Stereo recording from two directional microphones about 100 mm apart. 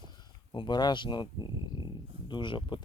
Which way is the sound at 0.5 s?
50° left (ahead or behind).